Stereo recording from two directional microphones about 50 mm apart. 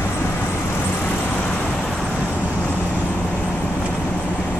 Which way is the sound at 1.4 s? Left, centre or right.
Left.